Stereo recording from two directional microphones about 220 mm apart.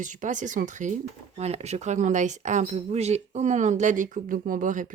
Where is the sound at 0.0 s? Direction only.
35° right (ahead or behind).